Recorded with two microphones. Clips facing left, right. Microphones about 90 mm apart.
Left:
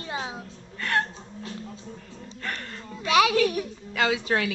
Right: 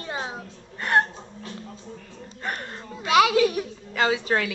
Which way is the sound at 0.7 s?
20° right (ahead or behind).